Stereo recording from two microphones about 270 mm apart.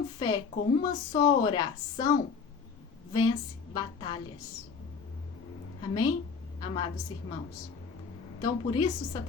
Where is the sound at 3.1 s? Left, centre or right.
Centre.